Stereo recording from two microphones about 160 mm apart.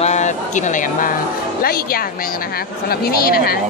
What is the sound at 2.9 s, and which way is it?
Speech, 70° left (ahead or behind).